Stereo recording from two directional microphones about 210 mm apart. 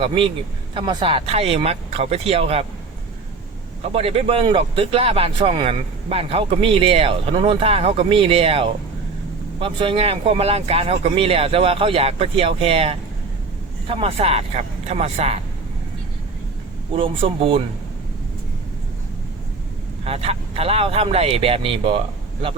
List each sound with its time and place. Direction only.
0.0 s speech: 25° right (ahead or behind)
3.9 s speech: 30° right (ahead or behind)
16.9 s speech: 25° right (ahead or behind)
20.1 s speech: 30° right (ahead or behind)